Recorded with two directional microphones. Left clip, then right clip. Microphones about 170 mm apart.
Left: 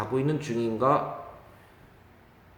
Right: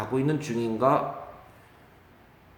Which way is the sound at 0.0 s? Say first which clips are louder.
Right 1 dB; 5° left (ahead or behind).